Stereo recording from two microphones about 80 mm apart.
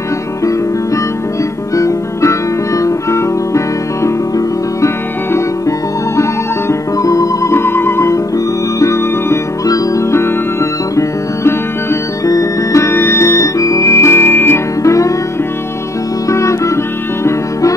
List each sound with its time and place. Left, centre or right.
1.8 s music: left
14.8 s music: left
16.3 s music: left